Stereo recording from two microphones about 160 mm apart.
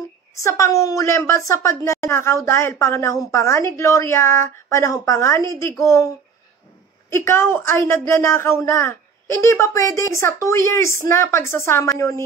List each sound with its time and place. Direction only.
0.4 s a woman's voice: 20° left (ahead or behind)
7.1 s a woman's voice: 15° left (ahead or behind)